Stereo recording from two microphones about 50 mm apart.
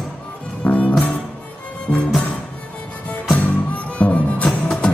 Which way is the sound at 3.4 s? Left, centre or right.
Left.